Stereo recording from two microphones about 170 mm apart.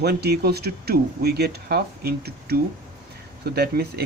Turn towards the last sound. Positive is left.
turn(degrees=-70)  # may be behind; listen again after turning